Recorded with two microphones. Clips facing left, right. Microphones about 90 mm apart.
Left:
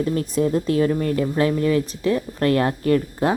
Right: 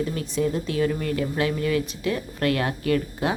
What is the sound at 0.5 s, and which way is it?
Speech, 40° left (ahead or behind).